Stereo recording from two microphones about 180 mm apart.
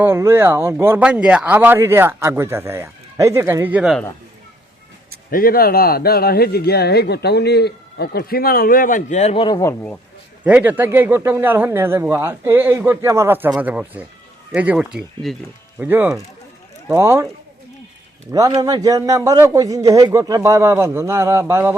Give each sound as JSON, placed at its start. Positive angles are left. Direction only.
{"t": 0.0, "sound": "speech", "side_deg": -10}
{"t": 5.3, "sound": "speech", "side_deg": 55}
{"t": 10.4, "sound": "speech", "side_deg": -10}
{"t": 18.3, "sound": "speech", "side_deg": -20}